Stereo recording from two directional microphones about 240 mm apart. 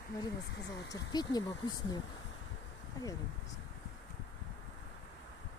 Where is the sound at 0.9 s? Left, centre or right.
Centre.